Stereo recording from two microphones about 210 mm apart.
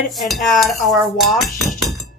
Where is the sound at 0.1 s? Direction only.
Centre (ahead or behind).